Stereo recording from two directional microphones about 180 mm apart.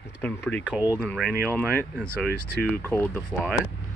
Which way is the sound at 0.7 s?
5° right (ahead or behind).